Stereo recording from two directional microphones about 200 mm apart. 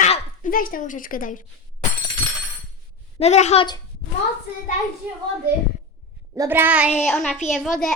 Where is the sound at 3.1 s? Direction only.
35° left (ahead or behind).